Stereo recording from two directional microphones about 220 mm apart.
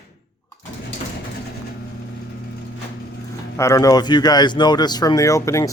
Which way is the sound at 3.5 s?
15° left (ahead or behind).